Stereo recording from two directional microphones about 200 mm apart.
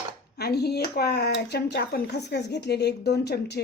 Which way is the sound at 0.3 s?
55° left (ahead or behind).